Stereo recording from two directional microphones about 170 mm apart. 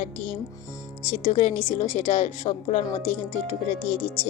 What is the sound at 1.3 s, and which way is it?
A woman's voice, 35° left (ahead or behind).